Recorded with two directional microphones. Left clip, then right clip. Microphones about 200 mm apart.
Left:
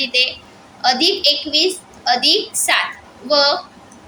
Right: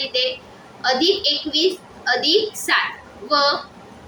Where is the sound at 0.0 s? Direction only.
45° left (ahead or behind).